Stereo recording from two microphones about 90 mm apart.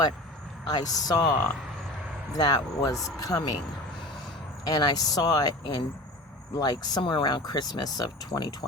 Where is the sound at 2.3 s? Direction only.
45° left (ahead or behind).